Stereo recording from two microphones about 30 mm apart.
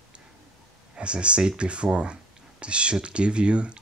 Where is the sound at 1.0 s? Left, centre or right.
Right.